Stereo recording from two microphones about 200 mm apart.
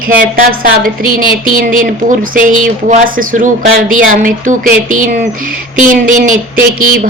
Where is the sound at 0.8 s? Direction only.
45° right (ahead or behind).